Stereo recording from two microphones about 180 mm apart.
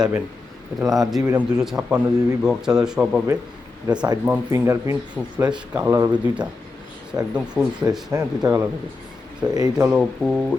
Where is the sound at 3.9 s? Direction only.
20° right (ahead or behind).